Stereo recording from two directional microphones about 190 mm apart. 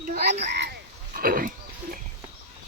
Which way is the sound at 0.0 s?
45° right (ahead or behind).